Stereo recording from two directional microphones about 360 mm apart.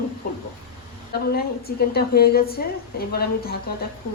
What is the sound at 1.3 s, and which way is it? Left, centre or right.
A woman's voice, left.